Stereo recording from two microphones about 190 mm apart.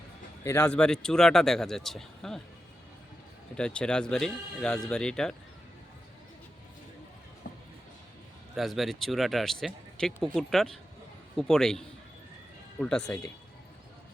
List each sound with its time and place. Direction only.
0.4 s speech: 15° left (ahead or behind)
3.5 s speech: 5° left (ahead or behind)
7.4 s music: 55° left (ahead or behind)
8.5 s speech: centre (ahead or behind)